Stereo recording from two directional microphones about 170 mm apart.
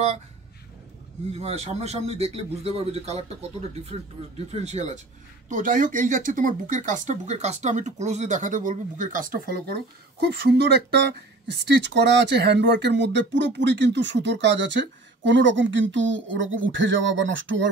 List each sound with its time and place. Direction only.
1.3 s a man's voice: 40° right (ahead or behind)
5.5 s speech: 50° right (ahead or behind); by 17.6 s 90° right